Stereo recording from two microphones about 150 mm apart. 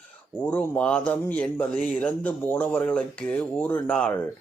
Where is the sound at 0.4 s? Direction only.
10° left (ahead or behind).